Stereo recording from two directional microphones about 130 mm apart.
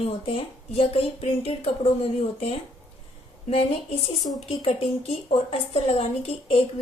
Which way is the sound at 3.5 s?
50° left (ahead or behind).